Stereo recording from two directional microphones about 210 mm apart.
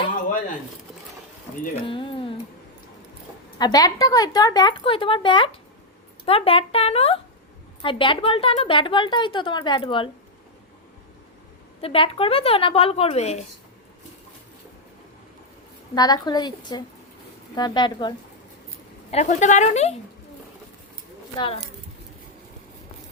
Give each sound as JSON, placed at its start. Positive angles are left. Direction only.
{"t": 1.9, "sound": "speech", "side_deg": 25}
{"t": 3.6, "sound": "a woman's voice", "side_deg": 20}
{"t": 11.8, "sound": "a woman's voice", "side_deg": 25}
{"t": 16.0, "sound": "a woman's voice", "side_deg": 20}
{"t": 19.1, "sound": "speech", "side_deg": 35}
{"t": 21.3, "sound": "a woman's voice", "side_deg": 25}